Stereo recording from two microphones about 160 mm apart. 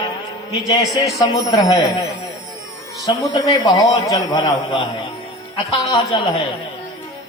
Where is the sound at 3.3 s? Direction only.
25° left (ahead or behind).